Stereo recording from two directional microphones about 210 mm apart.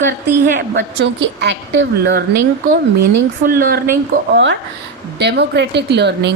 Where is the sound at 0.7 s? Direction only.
55° right (ahead or behind).